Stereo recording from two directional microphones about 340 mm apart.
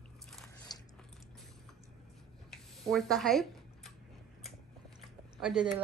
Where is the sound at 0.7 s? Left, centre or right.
Centre.